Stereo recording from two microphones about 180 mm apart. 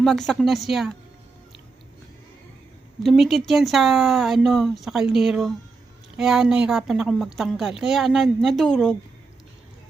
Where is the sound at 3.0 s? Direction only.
Centre (ahead or behind).